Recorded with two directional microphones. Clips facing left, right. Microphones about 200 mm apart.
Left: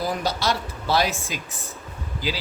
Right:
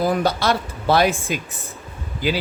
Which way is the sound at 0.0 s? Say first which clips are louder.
Right 6 dB; 55° right (ahead or behind).